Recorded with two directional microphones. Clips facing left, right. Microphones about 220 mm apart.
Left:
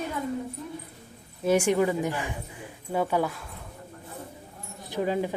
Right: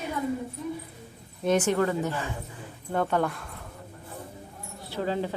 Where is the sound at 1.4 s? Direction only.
10° left (ahead or behind).